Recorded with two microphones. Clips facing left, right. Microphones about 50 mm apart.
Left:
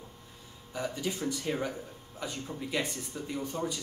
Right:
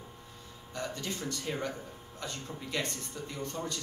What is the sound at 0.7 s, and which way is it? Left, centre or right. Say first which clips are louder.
Speech: left 3 dB; centre.